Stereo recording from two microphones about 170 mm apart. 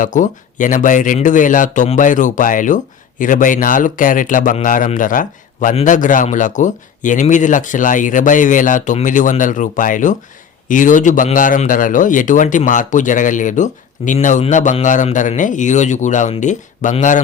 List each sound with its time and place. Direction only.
0.0 s speech: 50° left (ahead or behind)